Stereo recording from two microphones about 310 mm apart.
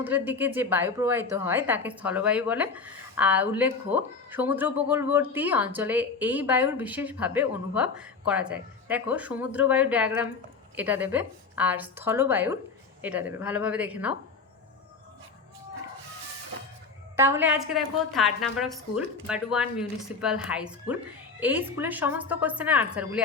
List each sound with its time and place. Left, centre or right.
0.0 s a woman's voice: centre
17.2 s a woman's voice: centre